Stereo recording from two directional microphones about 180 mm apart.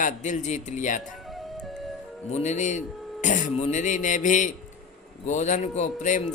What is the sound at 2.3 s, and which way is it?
Music, 40° left (ahead or behind).